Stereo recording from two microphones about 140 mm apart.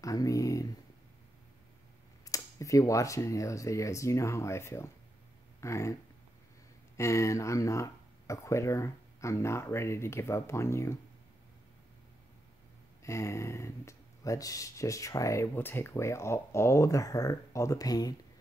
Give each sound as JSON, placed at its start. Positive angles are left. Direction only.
{"t": 0.0, "sound": "speech", "side_deg": 25}
{"t": 2.2, "sound": "speech", "side_deg": 25}
{"t": 7.0, "sound": "speech", "side_deg": 20}
{"t": 13.0, "sound": "speech", "side_deg": 20}